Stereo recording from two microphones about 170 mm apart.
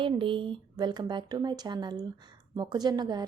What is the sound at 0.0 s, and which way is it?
A woman's voice, 30° right (ahead or behind).